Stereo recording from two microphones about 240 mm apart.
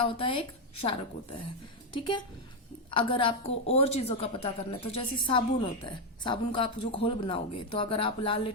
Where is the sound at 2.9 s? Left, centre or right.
Left.